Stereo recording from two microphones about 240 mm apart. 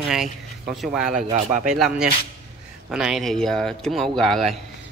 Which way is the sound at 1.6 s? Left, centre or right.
Centre.